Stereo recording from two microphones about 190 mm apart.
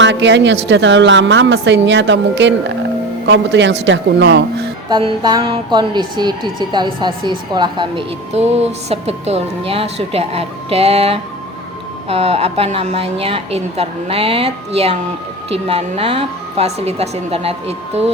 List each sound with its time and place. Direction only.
0.0 s a woman's voice: 70° right (ahead or behind)
4.9 s a woman's voice: 25° right (ahead or behind)